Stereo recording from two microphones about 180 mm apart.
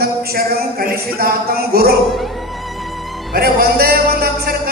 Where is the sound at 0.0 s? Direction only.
60° right (ahead or behind).